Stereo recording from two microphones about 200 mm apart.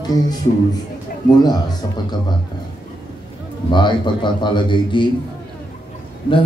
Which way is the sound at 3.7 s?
25° left (ahead or behind).